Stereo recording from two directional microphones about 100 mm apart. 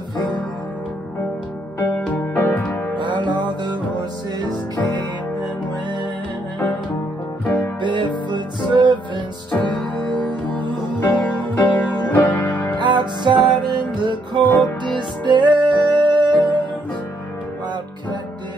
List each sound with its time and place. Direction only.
2.3 s music: 20° left (ahead or behind)
3.0 s music: 50° right (ahead or behind)
5.4 s music: 50° right (ahead or behind)
7.4 s music: 15° left (ahead or behind)
7.8 s music: 50° right (ahead or behind)
9.5 s music: 10° left (ahead or behind)
12.7 s music: 50° right (ahead or behind)